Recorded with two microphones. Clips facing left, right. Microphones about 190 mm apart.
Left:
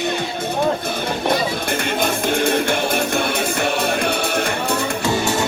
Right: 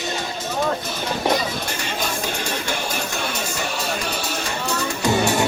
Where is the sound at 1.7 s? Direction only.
55° left (ahead or behind).